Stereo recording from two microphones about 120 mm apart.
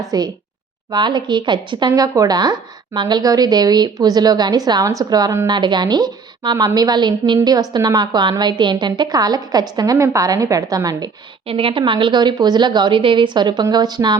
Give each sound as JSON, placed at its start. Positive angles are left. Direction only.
{"t": 0.1, "sound": "a woman's voice", "side_deg": -35}
{"t": 11.4, "sound": "a woman's voice", "side_deg": -50}